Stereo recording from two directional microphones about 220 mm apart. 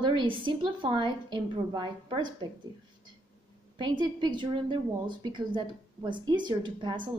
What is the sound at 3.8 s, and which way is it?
A woman's voice, 20° right (ahead or behind).